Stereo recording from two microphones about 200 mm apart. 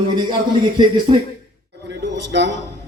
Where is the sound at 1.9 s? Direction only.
60° right (ahead or behind).